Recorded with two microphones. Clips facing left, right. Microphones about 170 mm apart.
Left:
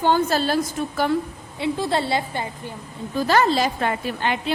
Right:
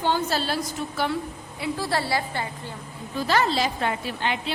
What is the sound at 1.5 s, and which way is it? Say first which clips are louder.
A woman's voice: left 4 dB; 25° left (ahead or behind).